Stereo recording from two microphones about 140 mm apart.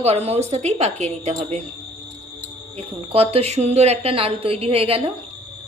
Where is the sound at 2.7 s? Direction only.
45° right (ahead or behind).